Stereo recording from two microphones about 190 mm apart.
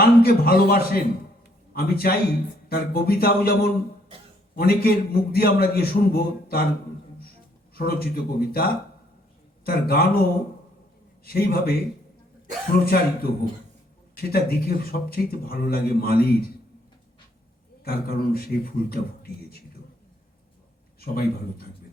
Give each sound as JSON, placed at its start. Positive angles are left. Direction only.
{"t": 0.0, "sound": "a man's voice", "side_deg": 55}
{"t": 7.8, "sound": "a man's voice", "side_deg": 55}
{"t": 11.3, "sound": "a man's voice", "side_deg": 50}
{"t": 12.8, "sound": "a man's voice", "side_deg": 55}
{"t": 17.8, "sound": "a man's voice", "side_deg": 55}
{"t": 21.0, "sound": "a man's voice", "side_deg": 55}